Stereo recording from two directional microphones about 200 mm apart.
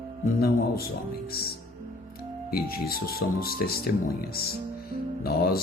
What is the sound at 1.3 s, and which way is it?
Speech, 50° left (ahead or behind).